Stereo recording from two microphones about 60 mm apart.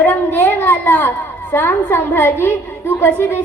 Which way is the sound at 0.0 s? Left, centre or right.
Left.